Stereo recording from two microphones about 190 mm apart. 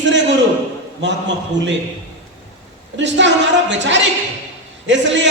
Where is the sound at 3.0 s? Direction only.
70° right (ahead or behind).